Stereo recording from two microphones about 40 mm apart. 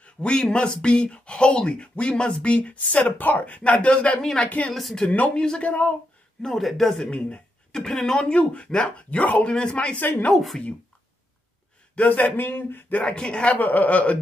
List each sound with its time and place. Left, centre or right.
0.0 s speech: left
5.3 s speech: centre
5.6 s speech: left
6.4 s speech: centre
7.1 s speech: left
7.7 s speech: centre; by 9.4 s left
9.4 s speech: left
10.3 s speech: centre
11.9 s speech: left
13.0 s speech: left
13.6 s speech: left